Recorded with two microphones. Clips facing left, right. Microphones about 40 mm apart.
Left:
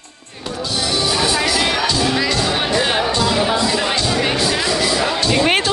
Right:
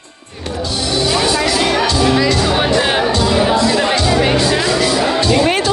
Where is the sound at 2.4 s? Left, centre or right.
Centre.